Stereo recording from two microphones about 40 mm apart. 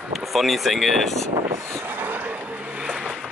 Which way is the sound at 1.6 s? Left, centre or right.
Right.